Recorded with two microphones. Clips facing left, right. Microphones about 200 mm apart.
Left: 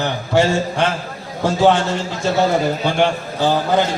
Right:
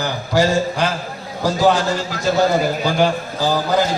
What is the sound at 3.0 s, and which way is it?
Speech, 25° left (ahead or behind).